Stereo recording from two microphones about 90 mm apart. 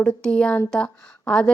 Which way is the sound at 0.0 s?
10° left (ahead or behind).